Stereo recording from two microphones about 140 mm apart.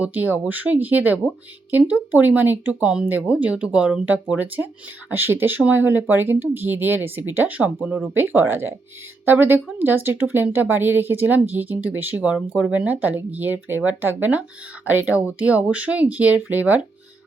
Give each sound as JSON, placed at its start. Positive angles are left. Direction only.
{"t": 0.0, "sound": "speech", "side_deg": -10}